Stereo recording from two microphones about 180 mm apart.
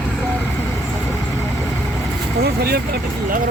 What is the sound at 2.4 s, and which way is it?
Speech, 60° right (ahead or behind).